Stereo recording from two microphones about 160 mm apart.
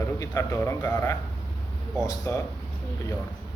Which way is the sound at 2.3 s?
15° left (ahead or behind).